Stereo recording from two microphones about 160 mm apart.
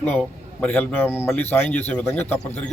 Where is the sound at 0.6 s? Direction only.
10° left (ahead or behind).